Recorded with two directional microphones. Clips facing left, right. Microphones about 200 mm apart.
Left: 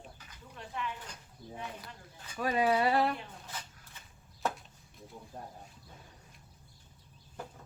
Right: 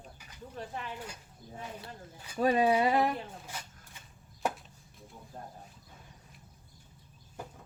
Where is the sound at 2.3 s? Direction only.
30° right (ahead or behind).